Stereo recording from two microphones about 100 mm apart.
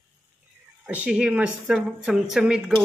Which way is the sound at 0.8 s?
10° right (ahead or behind).